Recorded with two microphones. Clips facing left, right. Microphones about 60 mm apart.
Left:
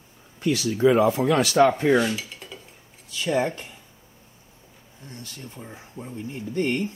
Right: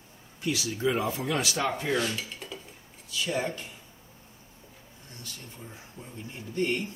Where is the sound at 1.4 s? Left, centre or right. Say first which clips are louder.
Left 15 dB; left.